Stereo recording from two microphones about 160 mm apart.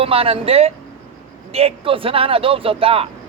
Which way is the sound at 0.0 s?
35° right (ahead or behind).